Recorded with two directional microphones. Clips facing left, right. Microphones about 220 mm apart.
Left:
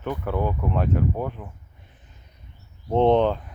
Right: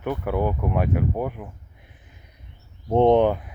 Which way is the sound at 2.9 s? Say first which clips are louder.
Right 2 dB; 15° right (ahead or behind).